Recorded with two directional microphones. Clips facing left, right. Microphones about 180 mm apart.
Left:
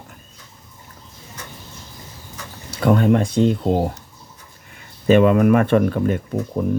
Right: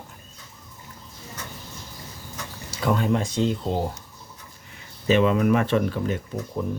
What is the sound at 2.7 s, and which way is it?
Speech, 60° left (ahead or behind).